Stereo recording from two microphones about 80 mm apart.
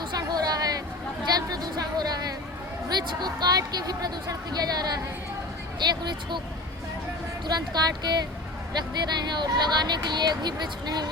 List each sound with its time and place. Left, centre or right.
0.1 s a sound: right
2.9 s speech: right
7.4 s speech: right